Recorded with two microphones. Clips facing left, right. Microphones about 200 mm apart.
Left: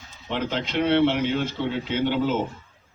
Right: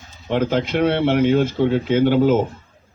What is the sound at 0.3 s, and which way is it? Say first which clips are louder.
Speech: right 8 dB; 50° right (ahead or behind).